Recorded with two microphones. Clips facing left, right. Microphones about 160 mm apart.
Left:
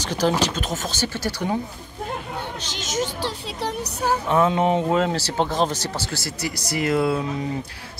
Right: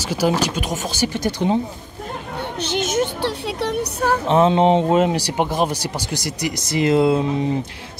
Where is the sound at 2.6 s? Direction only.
60° right (ahead or behind).